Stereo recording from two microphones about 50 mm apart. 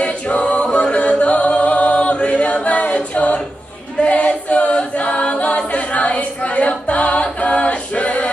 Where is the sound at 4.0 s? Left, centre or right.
Left.